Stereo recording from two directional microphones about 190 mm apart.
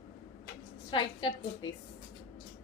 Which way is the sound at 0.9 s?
25° left (ahead or behind).